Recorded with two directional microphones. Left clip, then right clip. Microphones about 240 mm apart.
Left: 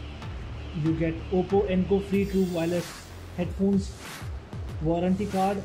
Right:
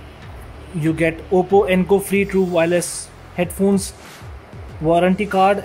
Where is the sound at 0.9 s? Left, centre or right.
Right.